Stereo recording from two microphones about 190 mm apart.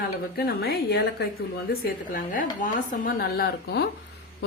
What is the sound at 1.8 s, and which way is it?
Speech, 45° left (ahead or behind).